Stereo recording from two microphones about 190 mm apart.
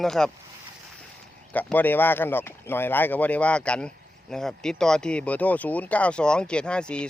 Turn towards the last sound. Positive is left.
turn(degrees=5)  # may be behind; listen again after turning